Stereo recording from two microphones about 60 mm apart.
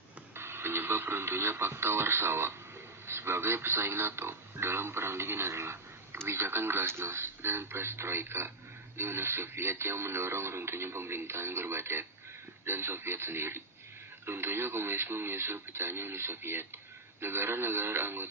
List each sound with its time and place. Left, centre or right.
0.3 s speech: right